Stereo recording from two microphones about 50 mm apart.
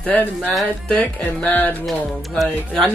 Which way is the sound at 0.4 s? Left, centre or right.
Centre.